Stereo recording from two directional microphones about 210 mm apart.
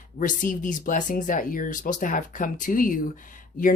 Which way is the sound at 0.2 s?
40° left (ahead or behind).